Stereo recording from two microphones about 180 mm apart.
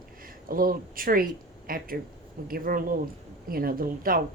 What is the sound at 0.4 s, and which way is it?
Speech, 55° right (ahead or behind).